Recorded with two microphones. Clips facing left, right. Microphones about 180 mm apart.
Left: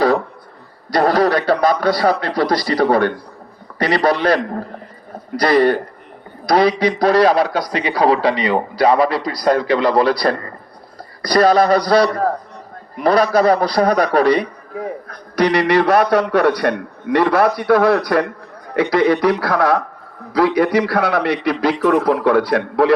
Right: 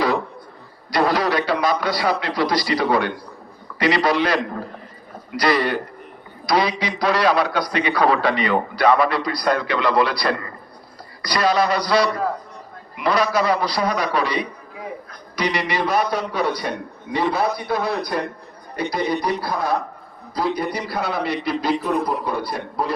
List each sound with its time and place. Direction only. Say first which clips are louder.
0.9 s a man's voice: left 5 dB; 60° left (ahead or behind); by 10.5 s 40° left (ahead or behind)
11.2 s a man's voice: left 7 dB; 55° left (ahead or behind); by 23.0 s 90° left